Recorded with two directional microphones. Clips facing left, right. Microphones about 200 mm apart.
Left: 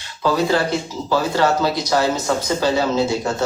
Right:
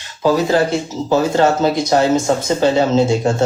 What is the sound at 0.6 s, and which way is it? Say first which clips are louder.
Speech: right 4 dB; 25° right (ahead or behind).